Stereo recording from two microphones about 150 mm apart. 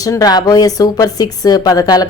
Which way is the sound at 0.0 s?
25° left (ahead or behind).